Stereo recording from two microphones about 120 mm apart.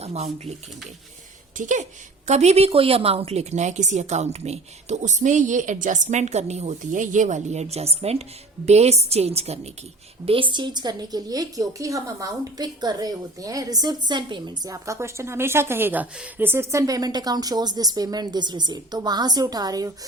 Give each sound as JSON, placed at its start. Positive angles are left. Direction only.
{"t": 0.0, "sound": "a woman's voice", "side_deg": -60}
{"t": 1.5, "sound": "a woman's voice", "side_deg": -90}
{"t": 10.2, "sound": "a woman's voice", "side_deg": -45}